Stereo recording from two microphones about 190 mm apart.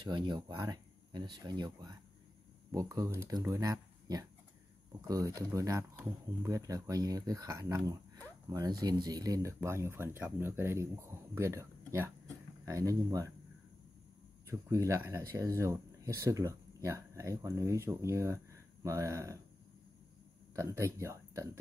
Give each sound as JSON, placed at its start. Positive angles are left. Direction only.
{"t": 0.0, "sound": "speech", "side_deg": -25}
{"t": 14.5, "sound": "speech", "side_deg": -15}
{"t": 20.5, "sound": "speech", "side_deg": -15}